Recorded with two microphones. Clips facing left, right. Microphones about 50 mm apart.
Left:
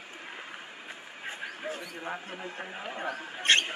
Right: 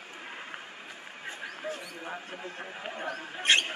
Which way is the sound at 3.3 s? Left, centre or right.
Centre.